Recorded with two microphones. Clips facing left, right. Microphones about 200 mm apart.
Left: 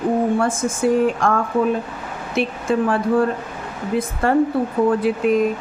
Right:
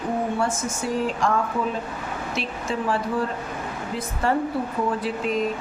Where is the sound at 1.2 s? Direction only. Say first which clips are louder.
Left 5 dB; 55° left (ahead or behind).